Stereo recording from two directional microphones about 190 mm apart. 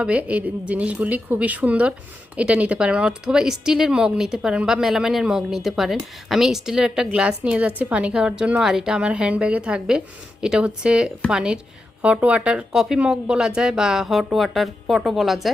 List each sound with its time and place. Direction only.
0.0 s speech: 5° right (ahead or behind)